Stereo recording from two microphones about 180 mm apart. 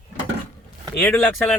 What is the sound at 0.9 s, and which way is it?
Speech, 10° left (ahead or behind).